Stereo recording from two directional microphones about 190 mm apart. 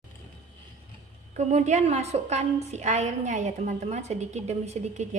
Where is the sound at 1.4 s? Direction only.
35° right (ahead or behind).